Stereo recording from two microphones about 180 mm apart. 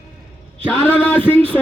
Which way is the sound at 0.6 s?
10° left (ahead or behind).